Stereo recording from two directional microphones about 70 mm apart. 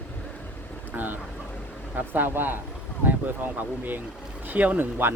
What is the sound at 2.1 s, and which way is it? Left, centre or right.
Speech, right.